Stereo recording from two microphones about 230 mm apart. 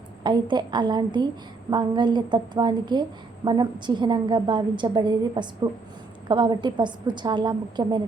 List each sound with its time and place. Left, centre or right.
0.2 s a woman's voice: centre